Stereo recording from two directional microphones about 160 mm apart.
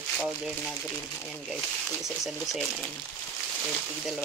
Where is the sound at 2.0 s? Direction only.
Centre (ahead or behind).